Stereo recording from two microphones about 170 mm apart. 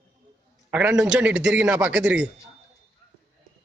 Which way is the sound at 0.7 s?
5° right (ahead or behind).